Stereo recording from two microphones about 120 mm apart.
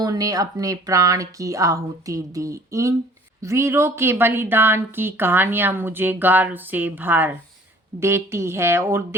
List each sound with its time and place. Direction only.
0.0 s a woman's voice: 30° right (ahead or behind)